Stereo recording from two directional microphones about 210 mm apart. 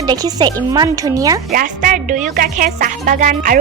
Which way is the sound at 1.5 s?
40° right (ahead or behind).